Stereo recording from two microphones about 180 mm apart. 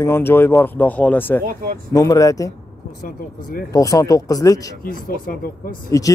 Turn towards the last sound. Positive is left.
turn(degrees=20)  # may be behind; listen again after turning